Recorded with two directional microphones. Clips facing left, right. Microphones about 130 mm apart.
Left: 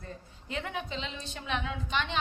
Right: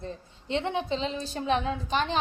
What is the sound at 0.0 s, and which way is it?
A woman's voice, 25° right (ahead or behind).